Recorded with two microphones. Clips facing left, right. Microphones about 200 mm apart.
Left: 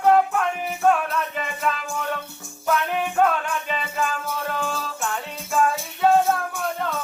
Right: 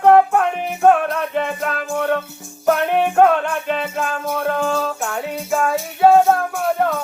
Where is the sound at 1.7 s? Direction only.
55° right (ahead or behind).